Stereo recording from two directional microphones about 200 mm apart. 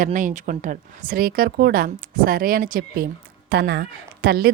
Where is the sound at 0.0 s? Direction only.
40° right (ahead or behind).